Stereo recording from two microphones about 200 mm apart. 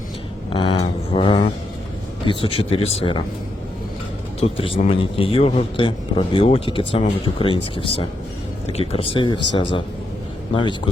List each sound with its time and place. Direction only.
0.5 s a sound: 25° left (ahead or behind)
2.2 s a man's voice: 25° left (ahead or behind)
4.4 s a man's voice: 30° left (ahead or behind)